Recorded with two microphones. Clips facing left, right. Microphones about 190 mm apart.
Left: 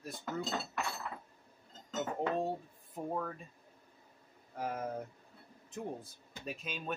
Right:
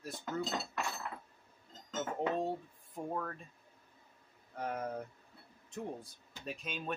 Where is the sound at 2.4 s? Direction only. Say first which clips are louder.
Even; 5° left (ahead or behind).